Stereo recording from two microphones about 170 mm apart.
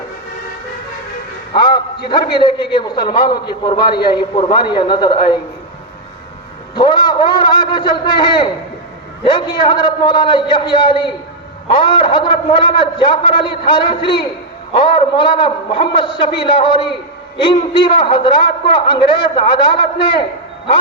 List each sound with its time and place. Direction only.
1.5 s a sound: 25° left (ahead or behind)
2.0 s a man's voice: 25° left (ahead or behind)
6.7 s a man's voice: 25° left (ahead or behind)